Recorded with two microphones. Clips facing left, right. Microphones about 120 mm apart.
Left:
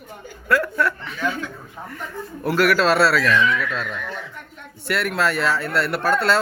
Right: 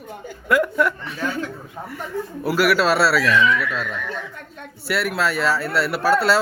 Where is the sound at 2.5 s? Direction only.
5° right (ahead or behind).